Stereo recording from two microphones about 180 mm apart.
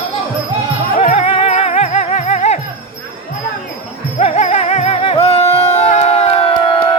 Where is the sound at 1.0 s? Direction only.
35° left (ahead or behind).